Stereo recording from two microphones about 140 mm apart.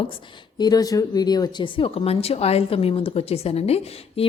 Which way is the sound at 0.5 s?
30° left (ahead or behind).